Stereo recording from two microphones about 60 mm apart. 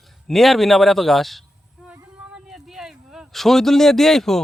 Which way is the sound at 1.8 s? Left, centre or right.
Centre.